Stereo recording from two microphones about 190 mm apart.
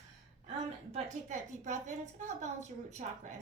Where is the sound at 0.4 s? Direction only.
35° right (ahead or behind).